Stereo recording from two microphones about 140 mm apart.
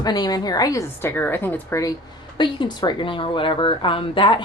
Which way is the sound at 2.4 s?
35° left (ahead or behind).